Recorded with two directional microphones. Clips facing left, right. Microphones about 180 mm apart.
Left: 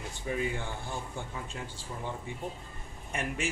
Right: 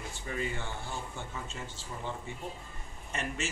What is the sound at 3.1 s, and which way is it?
Speech, 10° left (ahead or behind).